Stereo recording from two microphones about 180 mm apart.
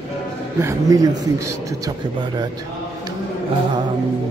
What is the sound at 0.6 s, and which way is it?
Speech, 15° right (ahead or behind).